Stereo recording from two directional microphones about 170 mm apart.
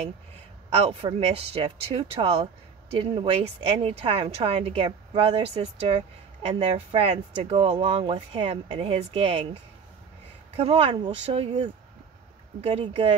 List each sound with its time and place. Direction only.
0.7 s speech: 35° right (ahead or behind)